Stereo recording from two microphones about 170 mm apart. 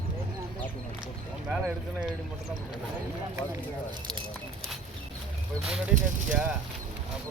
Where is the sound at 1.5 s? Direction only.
5° right (ahead or behind).